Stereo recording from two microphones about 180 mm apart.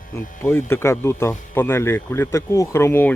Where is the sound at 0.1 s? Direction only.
15° left (ahead or behind).